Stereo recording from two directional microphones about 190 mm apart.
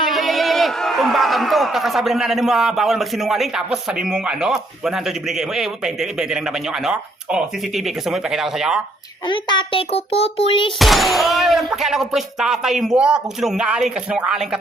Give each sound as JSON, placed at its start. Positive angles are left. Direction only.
{"t": 0.1, "sound": "a man's voice", "side_deg": 0}
{"t": 9.2, "sound": "a child's voice", "side_deg": 25}
{"t": 10.8, "sound": "a man's voice", "side_deg": 0}